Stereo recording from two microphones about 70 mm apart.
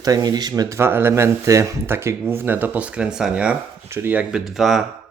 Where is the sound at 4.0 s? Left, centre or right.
Right.